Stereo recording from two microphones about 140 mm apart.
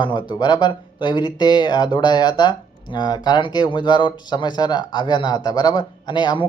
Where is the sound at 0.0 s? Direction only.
35° left (ahead or behind).